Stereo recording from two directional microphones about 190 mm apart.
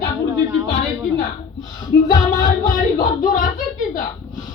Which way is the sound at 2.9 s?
45° left (ahead or behind).